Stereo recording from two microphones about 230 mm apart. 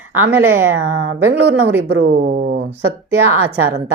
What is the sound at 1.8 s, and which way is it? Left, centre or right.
Speech, right.